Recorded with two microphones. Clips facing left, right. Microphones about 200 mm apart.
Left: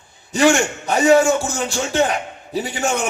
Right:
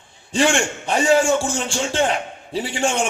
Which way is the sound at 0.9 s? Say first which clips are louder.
Left 3 dB; 25° right (ahead or behind).